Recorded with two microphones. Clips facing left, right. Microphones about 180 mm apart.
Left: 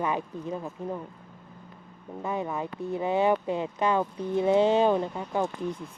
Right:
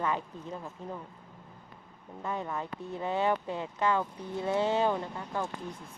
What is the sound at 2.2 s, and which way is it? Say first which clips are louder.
Speech: left 4 dB; 15° left (ahead or behind).